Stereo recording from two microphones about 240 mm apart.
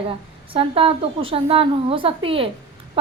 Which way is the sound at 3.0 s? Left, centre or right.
Right.